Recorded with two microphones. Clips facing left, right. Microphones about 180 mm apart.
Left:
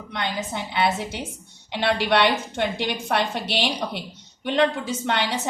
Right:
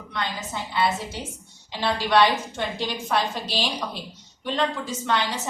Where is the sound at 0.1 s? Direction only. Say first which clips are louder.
Left 2 dB; 65° left (ahead or behind).